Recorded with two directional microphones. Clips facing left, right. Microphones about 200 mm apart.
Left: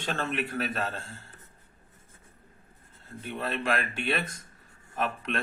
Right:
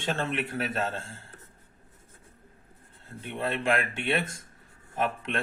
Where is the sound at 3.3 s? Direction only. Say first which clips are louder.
Right 2 dB; 25° right (ahead or behind).